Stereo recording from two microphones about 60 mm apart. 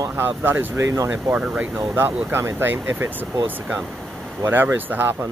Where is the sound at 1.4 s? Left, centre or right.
Centre.